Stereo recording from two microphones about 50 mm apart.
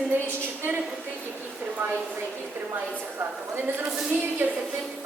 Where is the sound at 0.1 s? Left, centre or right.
Right.